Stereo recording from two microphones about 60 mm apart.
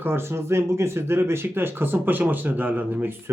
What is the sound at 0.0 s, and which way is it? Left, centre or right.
Speech, right.